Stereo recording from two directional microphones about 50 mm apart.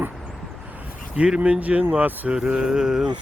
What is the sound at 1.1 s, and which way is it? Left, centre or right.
Speech, centre.